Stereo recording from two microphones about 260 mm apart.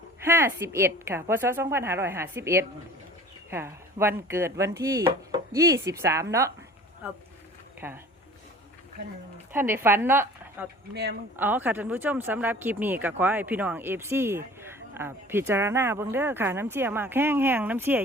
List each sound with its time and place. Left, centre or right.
0.3 s speech: centre
7.8 s speech: centre
9.5 s a woman's voice: centre